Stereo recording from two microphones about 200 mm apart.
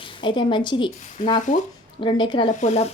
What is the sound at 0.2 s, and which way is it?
A woman's voice, 25° left (ahead or behind).